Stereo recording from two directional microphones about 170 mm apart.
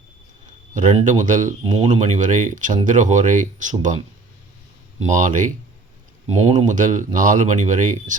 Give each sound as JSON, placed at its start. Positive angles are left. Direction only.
{"t": 0.7, "sound": "speech", "side_deg": -45}
{"t": 1.6, "sound": "speech", "side_deg": -30}